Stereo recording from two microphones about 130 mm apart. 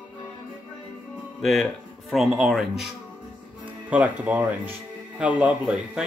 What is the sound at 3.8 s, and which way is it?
Speech, 10° right (ahead or behind).